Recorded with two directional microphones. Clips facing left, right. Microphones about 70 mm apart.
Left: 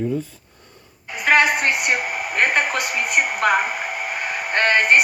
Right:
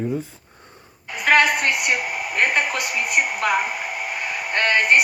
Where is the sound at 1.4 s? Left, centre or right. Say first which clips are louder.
Left 1 dB; left.